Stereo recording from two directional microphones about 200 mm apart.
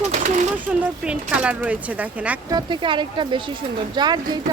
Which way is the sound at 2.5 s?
20° right (ahead or behind).